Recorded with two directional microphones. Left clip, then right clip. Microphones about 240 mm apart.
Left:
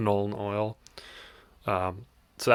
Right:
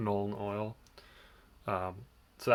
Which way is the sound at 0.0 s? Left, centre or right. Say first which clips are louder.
Left 7 dB; left.